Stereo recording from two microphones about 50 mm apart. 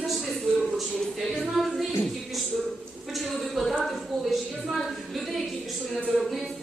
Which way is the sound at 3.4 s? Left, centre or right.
Centre.